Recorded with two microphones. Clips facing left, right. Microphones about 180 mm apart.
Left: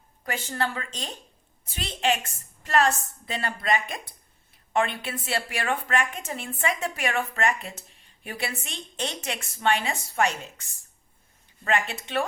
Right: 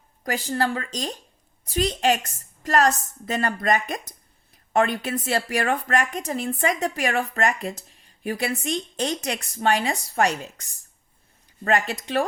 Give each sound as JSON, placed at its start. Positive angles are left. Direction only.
{"t": 0.3, "sound": "a woman's voice", "side_deg": -35}